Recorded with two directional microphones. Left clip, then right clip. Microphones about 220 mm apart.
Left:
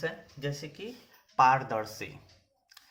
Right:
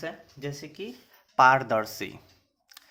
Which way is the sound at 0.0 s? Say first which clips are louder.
Left 1 dB; 30° right (ahead or behind).